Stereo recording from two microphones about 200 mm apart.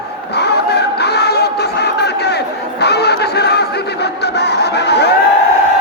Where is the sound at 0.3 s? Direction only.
55° left (ahead or behind).